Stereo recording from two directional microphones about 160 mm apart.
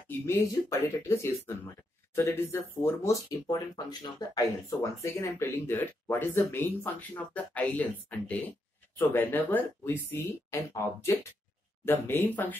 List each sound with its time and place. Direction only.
0.2 s speech: 15° left (ahead or behind)